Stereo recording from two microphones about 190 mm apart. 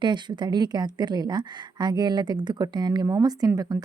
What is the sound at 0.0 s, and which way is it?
A woman's voice, 25° right (ahead or behind).